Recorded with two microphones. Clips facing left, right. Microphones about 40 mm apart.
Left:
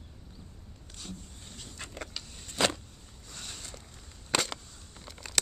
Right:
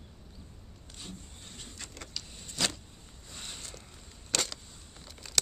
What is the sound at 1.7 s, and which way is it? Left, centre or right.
Vehicle, left.